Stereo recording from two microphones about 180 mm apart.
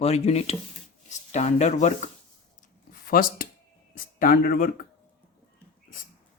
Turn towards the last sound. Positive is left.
turn(degrees=55)  # may be behind; listen again after turning